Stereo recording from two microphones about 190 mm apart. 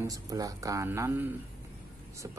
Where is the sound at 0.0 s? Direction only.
20° right (ahead or behind).